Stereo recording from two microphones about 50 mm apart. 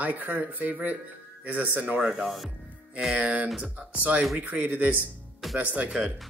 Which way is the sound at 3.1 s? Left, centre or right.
Right.